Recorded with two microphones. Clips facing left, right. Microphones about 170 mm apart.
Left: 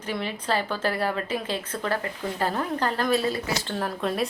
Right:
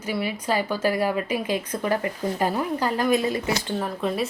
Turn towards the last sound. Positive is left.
turn(degrees=0)  # may be behind; listen again after turning